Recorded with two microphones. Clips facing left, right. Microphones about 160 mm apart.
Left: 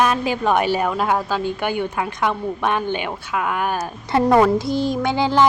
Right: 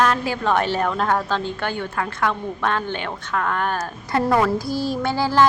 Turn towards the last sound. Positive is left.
turn(degrees=20)  # may be behind; listen again after turning